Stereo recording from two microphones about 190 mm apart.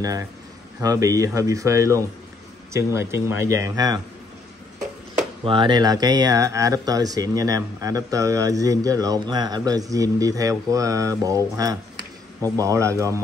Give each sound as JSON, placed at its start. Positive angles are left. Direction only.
{"t": 0.7, "sound": "speech", "side_deg": -20}
{"t": 5.4, "sound": "speech", "side_deg": -25}